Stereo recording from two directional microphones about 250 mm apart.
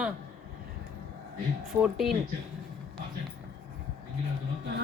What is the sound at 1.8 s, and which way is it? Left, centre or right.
Speech, centre.